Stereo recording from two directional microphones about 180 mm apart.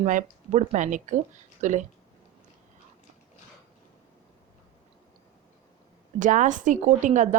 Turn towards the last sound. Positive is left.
turn(degrees=-45)  # may be behind; listen again after turning